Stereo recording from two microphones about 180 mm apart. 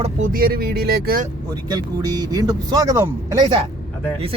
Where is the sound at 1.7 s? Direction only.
20° right (ahead or behind).